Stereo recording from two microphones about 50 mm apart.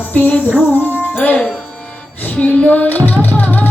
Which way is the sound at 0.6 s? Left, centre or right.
Left.